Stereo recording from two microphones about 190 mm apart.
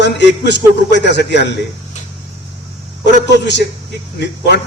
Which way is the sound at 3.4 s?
65° left (ahead or behind).